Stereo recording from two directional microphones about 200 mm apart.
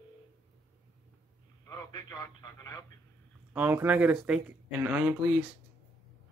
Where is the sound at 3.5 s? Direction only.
10° right (ahead or behind).